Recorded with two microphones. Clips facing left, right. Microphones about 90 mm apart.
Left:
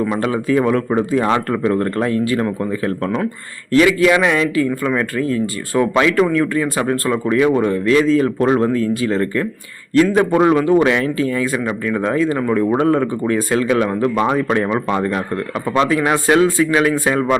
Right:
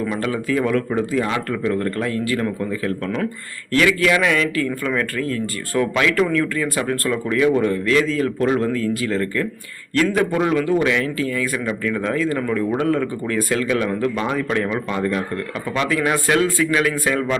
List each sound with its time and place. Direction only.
0.1 s a man's voice: 25° left (ahead or behind)
12.5 s a man's voice: 35° left (ahead or behind)